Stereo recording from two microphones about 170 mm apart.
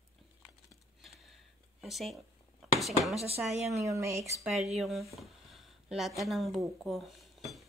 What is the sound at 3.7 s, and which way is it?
Speech, 20° right (ahead or behind).